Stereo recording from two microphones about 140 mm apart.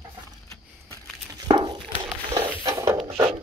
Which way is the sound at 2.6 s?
20° right (ahead or behind).